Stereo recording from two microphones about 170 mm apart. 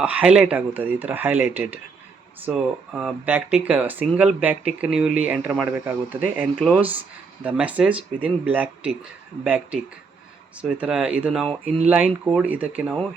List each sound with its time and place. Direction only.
0.0 s speech: 5° right (ahead or behind)
6.6 s speech: 5° left (ahead or behind)
7.4 s speech: 10° right (ahead or behind)